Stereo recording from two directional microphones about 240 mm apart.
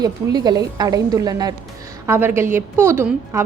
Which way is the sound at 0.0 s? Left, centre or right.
Centre.